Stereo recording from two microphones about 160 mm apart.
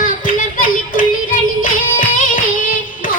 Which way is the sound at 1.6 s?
60° left (ahead or behind).